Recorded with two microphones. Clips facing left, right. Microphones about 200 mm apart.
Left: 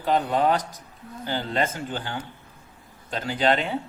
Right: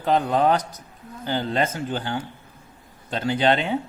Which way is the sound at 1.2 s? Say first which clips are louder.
Right 3 dB; 40° right (ahead or behind).